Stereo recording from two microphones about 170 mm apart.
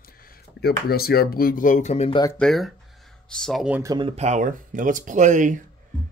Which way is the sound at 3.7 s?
15° right (ahead or behind).